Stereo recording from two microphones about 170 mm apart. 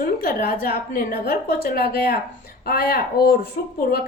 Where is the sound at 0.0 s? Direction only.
55° left (ahead or behind).